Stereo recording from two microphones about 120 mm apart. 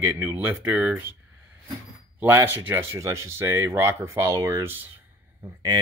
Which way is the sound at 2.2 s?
20° right (ahead or behind).